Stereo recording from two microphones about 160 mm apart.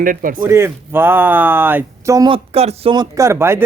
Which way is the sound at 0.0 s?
60° right (ahead or behind).